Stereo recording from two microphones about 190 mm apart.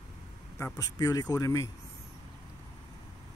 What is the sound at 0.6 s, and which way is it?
Speech, 15° left (ahead or behind).